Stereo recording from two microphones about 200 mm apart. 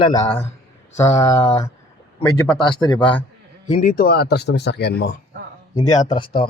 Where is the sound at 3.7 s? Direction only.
45° left (ahead or behind).